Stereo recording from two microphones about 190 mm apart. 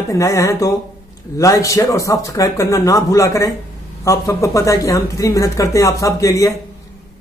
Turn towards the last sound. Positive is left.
turn(degrees=15)  # may be behind; listen again after turning